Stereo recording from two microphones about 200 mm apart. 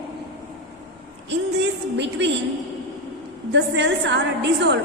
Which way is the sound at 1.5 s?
60° right (ahead or behind).